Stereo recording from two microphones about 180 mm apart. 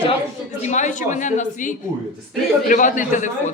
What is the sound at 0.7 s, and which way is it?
A woman's voice, 40° left (ahead or behind).